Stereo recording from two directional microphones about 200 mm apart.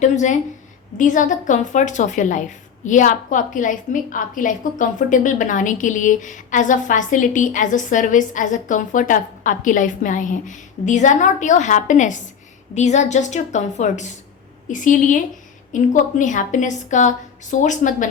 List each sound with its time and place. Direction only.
0.0 s a woman's voice: 35° left (ahead or behind)